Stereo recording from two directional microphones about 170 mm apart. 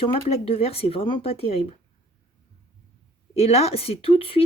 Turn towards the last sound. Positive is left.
turn(degrees=35)  # may be behind; listen again after turning